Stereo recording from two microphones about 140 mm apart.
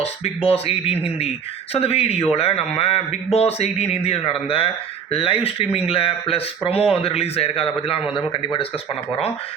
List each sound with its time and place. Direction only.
0.0 s speech: 45° left (ahead or behind)